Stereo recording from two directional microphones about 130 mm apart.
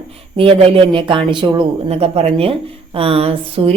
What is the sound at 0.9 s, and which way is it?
Speech, 40° right (ahead or behind).